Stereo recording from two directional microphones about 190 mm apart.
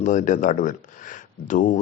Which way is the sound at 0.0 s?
40° left (ahead or behind).